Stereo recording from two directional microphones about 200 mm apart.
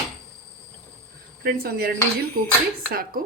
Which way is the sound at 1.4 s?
50° right (ahead or behind).